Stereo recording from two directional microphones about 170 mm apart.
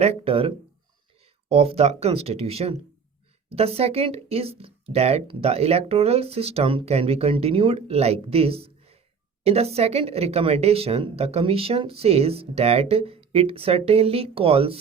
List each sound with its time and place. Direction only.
0.0 s a woman's voice: 35° right (ahead or behind)